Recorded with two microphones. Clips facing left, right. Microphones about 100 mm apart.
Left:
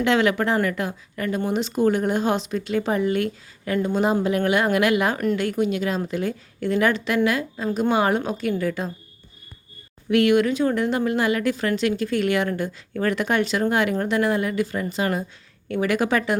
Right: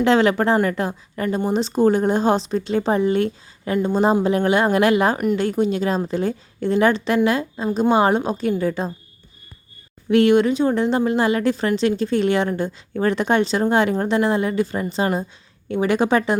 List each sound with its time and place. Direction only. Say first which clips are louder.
0.0 s speech: right 4 dB; 35° right (ahead or behind)
5.1 s a woman's voice: right 2 dB; 10° right (ahead or behind)
5.4 s a woman's voice: right 3 dB; 30° right (ahead or behind)
10.1 s a woman's voice: right 3 dB; 30° right (ahead or behind)